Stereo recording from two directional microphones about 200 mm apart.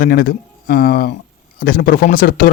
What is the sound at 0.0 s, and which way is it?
A man's voice, 50° left (ahead or behind).